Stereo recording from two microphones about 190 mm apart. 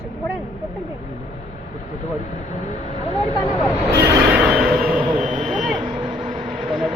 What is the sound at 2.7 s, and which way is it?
Speech, 35° left (ahead or behind).